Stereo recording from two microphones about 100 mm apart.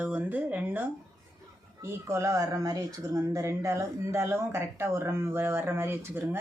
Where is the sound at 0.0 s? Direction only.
20° right (ahead or behind).